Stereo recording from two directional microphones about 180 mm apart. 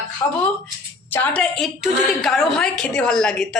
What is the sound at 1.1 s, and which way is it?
A woman's voice, 10° left (ahead or behind).